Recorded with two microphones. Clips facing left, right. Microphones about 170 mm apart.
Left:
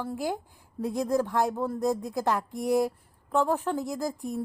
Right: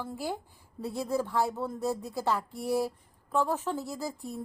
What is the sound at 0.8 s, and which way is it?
A woman's voice, 15° left (ahead or behind).